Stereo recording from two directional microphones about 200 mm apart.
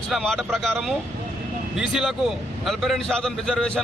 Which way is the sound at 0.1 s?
Centre (ahead or behind).